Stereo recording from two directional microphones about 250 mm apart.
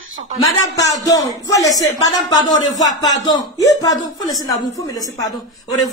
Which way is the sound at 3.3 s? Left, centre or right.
Centre.